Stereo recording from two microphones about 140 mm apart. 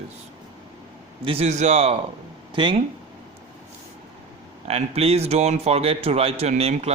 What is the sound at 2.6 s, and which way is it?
Speech, 35° right (ahead or behind).